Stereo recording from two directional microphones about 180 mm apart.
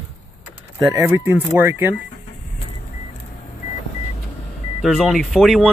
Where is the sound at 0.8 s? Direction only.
15° right (ahead or behind).